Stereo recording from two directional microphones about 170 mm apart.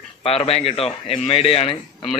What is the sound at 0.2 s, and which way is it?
Speech, 35° left (ahead or behind).